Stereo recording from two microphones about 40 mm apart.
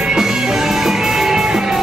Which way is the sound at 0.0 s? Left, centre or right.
Centre.